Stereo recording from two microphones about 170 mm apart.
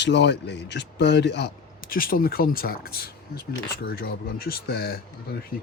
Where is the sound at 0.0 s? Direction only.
90° left.